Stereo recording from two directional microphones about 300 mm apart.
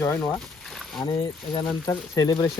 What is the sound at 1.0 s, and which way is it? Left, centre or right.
Speech, centre.